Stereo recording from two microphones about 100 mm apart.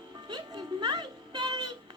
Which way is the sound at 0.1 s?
45° right (ahead or behind).